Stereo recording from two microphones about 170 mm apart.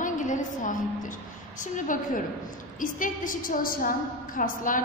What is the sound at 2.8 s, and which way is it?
A woman's voice, 55° left (ahead or behind).